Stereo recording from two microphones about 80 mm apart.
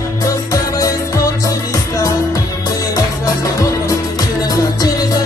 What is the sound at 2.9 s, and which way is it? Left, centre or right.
Music, left.